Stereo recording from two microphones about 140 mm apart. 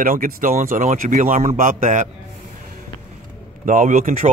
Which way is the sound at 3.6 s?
70° right (ahead or behind).